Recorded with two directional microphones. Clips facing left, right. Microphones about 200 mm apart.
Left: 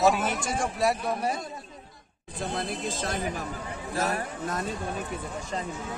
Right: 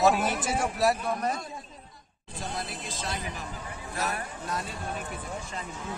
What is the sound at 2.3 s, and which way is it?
Speech, 55° left (ahead or behind).